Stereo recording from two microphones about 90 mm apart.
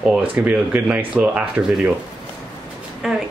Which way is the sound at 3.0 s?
5° right (ahead or behind).